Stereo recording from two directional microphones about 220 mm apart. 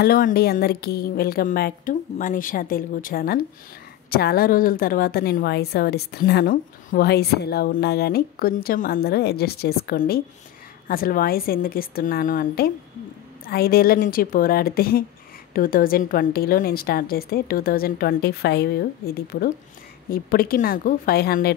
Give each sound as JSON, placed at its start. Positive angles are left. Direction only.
{"t": 0.0, "sound": "a woman's voice", "side_deg": 45}